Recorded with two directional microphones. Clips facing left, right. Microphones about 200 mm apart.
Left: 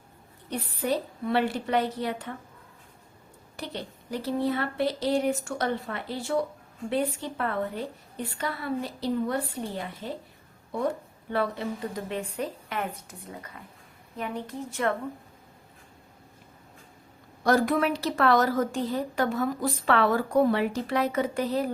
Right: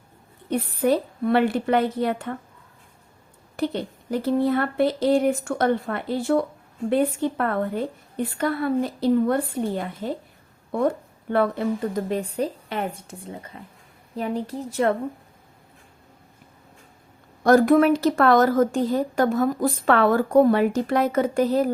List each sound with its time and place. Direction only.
0.5 s a woman's voice: 55° right (ahead or behind)
3.6 s a woman's voice: 50° right (ahead or behind); by 14.9 s 35° right (ahead or behind)
17.4 s speech: 50° right (ahead or behind)